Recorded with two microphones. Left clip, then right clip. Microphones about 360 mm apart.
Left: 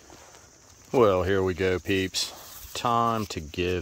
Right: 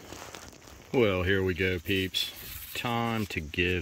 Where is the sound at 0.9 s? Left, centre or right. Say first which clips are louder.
Left 5 dB; centre.